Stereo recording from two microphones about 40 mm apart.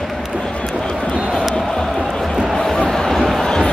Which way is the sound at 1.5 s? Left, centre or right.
Centre.